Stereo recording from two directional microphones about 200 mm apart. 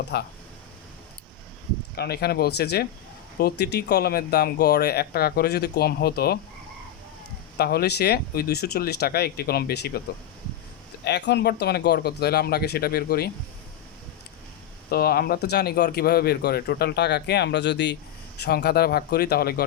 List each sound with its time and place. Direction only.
0.1 s speech: 55° left (ahead or behind)
2.0 s speech: 55° left (ahead or behind)
7.6 s speech: 50° left (ahead or behind)
11.0 s speech: 60° left (ahead or behind)
14.8 s speech: 50° left (ahead or behind)